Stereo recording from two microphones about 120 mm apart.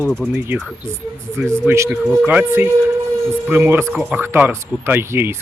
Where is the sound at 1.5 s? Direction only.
20° right (ahead or behind).